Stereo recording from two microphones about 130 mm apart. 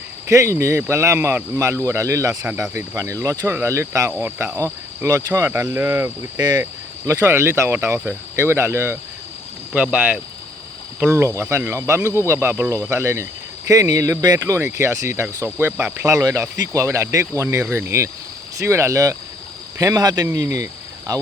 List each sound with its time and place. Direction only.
0.3 s speech: 25° right (ahead or behind)
2.4 s speech: 5° right (ahead or behind)
2.7 s speech: 25° right (ahead or behind)